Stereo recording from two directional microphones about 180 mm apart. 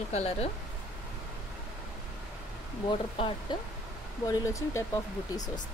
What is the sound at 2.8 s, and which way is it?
Speech, 25° left (ahead or behind).